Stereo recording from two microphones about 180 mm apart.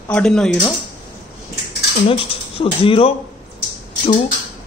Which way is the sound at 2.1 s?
30° left (ahead or behind).